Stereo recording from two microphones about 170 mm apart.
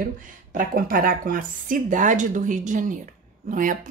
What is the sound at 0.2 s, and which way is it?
A woman's voice, 55° right (ahead or behind).